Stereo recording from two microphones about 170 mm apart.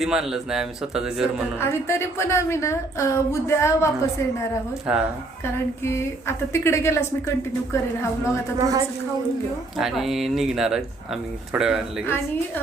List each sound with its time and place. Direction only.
0.0 s speech: 5° right (ahead or behind)
1.5 s a woman's voice: 15° left (ahead or behind)
4.9 s speech: 5° right (ahead or behind)
5.8 s a woman's voice: 15° left (ahead or behind)
8.5 s a man's voice: 20° right (ahead or behind)
9.7 s speech: centre (ahead or behind)